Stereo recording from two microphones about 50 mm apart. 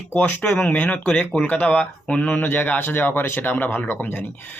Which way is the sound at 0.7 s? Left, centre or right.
Left.